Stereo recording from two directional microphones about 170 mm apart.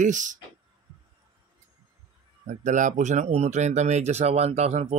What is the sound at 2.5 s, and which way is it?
Speech, 45° right (ahead or behind).